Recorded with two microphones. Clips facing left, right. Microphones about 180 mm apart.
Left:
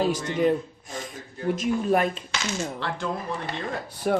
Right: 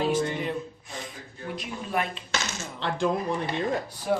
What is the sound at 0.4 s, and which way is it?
Gasp, 45° left (ahead or behind).